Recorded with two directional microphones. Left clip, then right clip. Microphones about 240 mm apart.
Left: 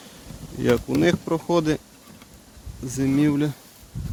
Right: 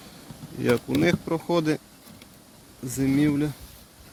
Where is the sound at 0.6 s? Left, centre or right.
Centre.